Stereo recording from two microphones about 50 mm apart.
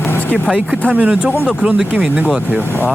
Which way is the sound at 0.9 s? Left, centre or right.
Right.